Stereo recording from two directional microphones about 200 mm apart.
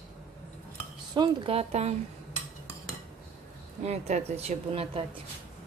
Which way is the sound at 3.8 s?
35° right (ahead or behind).